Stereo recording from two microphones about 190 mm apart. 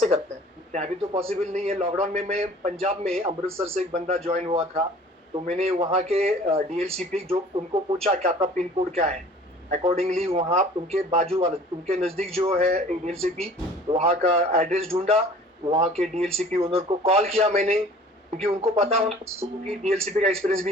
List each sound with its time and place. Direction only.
0.7 s a man's voice: 35° right (ahead or behind)
6.8 s speech: 5° left (ahead or behind)
7.3 s a man's voice: 30° right (ahead or behind)